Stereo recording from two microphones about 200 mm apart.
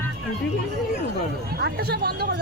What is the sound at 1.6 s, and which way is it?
Speech, 55° right (ahead or behind).